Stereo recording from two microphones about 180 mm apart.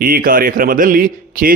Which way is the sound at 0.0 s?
50° right (ahead or behind).